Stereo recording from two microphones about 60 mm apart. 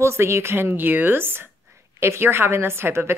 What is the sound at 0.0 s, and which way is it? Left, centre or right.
A woman's voice, right.